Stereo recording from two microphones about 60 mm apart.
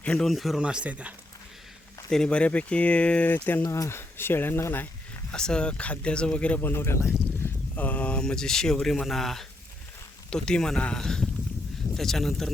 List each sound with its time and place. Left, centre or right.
0.0 s a man's voice: centre
0.3 s a man's voice: centre
0.6 s speech: centre
2.0 s speech: centre; by 3.6 s left
3.6 s speech: left
5.3 s speech: centre
6.6 s speech: left
7.8 s speech: left; by 12.5 s centre